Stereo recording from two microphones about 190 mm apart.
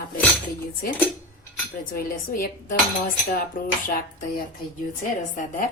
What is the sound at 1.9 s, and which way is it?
Speech, 45° left (ahead or behind).